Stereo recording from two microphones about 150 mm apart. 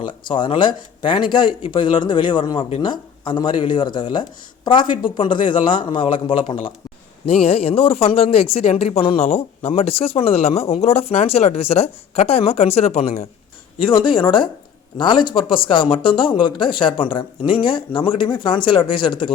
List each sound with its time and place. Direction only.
0.0 s speech: 35° left (ahead or behind)
13.8 s speech: 35° left (ahead or behind)